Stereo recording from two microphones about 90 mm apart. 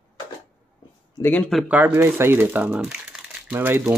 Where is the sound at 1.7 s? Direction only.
15° right (ahead or behind).